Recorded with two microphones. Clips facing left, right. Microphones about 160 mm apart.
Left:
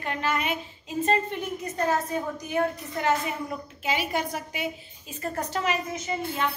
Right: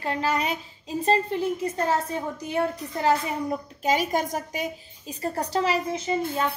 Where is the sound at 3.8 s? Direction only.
45° right (ahead or behind).